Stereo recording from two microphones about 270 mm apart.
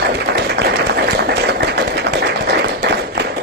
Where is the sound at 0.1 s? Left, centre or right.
Right.